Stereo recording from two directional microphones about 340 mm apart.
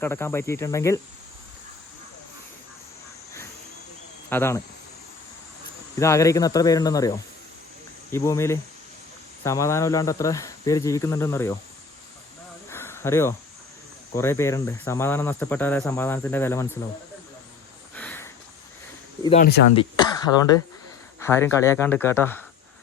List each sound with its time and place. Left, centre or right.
0.0 s cricket: centre
4.3 s cricket: centre
6.0 s cricket: centre
8.1 s cricket: centre
12.7 s snake: centre
14.2 s cricket: centre
17.9 s a sound: centre
19.2 s cricket: centre